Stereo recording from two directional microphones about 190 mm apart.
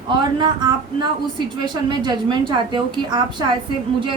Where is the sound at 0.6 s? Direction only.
25° right (ahead or behind).